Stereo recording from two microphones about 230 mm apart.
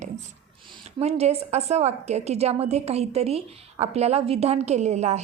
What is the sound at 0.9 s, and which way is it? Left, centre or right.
A woman's voice, right.